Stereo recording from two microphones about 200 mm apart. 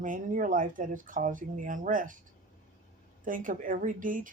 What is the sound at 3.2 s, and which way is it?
Speech, 40° right (ahead or behind).